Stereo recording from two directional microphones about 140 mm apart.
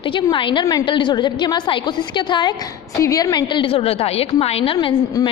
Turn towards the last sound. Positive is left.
turn(degrees=25)  # may be behind; listen again after turning